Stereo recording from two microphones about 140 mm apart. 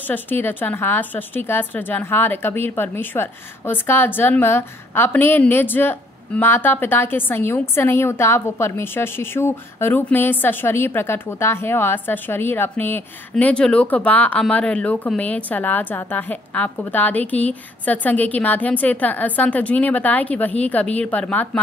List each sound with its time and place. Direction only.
0.0 s a woman's voice: 15° left (ahead or behind)